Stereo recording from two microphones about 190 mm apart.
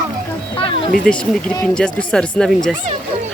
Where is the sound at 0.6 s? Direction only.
30° left (ahead or behind).